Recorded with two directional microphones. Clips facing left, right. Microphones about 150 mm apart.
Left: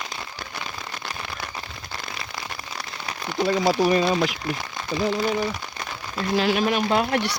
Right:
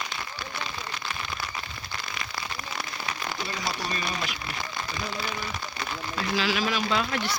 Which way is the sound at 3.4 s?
85° left.